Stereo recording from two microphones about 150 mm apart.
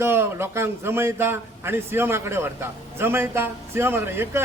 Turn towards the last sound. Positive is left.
turn(degrees=-15)  # may be behind; listen again after turning